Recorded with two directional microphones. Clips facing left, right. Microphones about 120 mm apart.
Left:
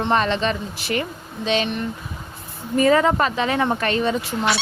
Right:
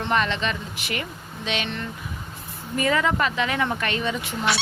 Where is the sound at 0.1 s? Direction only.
35° left (ahead or behind).